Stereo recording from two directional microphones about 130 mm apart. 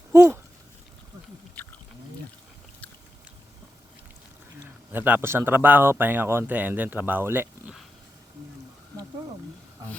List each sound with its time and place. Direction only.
0.1 s speech: 20° right (ahead or behind)
4.9 s speech: 15° right (ahead or behind)